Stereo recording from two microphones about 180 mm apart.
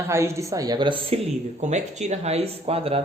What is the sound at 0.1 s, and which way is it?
Speech, 15° right (ahead or behind).